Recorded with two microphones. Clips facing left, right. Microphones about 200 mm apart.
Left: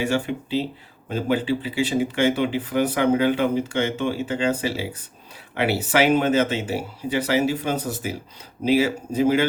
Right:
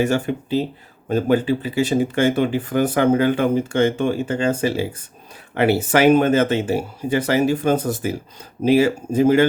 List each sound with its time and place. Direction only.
0.0 s speech: 45° right (ahead or behind)